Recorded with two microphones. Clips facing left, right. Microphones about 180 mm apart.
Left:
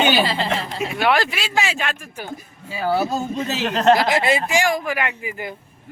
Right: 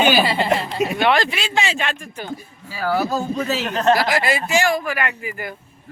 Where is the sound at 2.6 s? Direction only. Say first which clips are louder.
Even; 20° left (ahead or behind).